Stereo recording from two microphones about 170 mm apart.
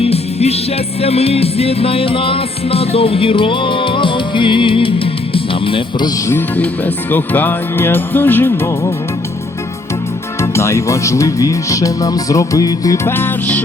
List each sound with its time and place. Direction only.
0.0 s music: 35° left (ahead or behind)
5.3 s speech: 30° left (ahead or behind)
6.2 s speech: 10° left (ahead or behind)
10.4 s speech: 15° left (ahead or behind)